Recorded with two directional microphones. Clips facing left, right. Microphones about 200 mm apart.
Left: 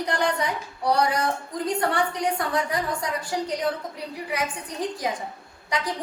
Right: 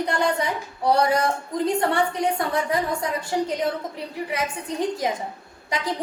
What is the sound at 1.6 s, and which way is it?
A woman's voice, 25° right (ahead or behind).